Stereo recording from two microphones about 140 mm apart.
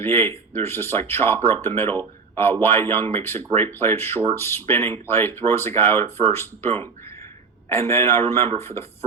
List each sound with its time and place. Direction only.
0.0 s speech: 15° left (ahead or behind)
7.7 s speech: 15° left (ahead or behind)
8.4 s speech: 45° right (ahead or behind)